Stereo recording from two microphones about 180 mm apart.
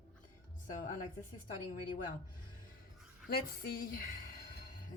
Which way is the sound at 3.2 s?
55° left (ahead or behind).